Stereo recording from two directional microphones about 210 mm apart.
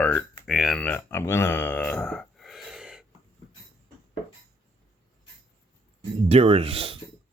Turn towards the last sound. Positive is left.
turn(degrees=-25)  # may be behind; listen again after turning